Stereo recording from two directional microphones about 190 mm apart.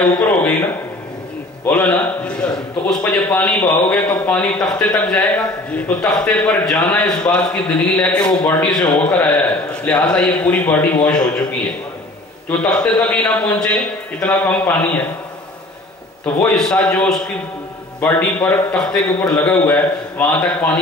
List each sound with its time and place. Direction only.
0.2 s speech: 10° left (ahead or behind)
1.7 s a man's voice: 10° left (ahead or behind)
12.4 s a man's voice: 5° left (ahead or behind)
16.5 s a man's voice: 5° left (ahead or behind)